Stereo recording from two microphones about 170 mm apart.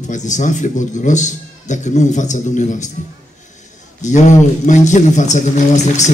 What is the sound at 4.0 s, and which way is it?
A man's voice, 45° left (ahead or behind).